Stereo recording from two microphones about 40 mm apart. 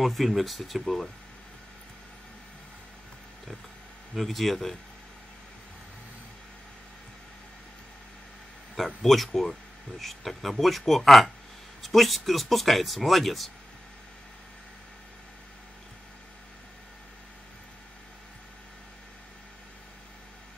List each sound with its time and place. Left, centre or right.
0.0 s speech: centre
4.2 s speech: centre
8.7 s speech: centre